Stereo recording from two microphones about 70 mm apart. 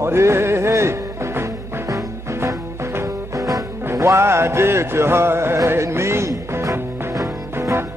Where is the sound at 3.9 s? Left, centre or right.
Right.